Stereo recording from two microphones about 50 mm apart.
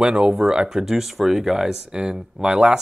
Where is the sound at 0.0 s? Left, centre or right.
Centre.